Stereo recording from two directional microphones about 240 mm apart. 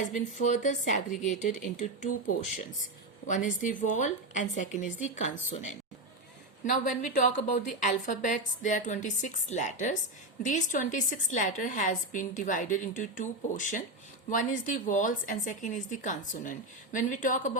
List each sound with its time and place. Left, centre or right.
0.1 s a woman's voice: left
3.2 s a woman's voice: left